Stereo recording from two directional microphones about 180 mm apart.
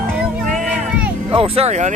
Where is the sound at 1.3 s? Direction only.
35° right (ahead or behind).